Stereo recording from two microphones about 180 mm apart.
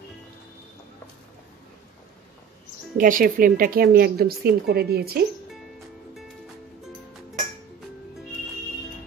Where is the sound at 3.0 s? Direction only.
50° right (ahead or behind).